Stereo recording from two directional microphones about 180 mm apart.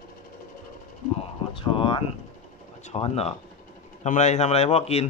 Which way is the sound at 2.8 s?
35° left (ahead or behind).